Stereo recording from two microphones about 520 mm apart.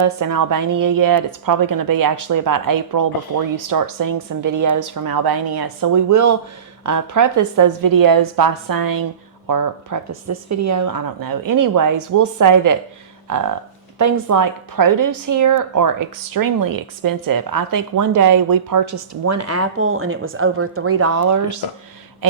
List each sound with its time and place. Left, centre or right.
0.0 s a woman's voice: right